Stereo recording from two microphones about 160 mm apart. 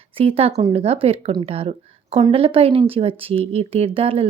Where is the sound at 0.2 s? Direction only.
35° right (ahead or behind).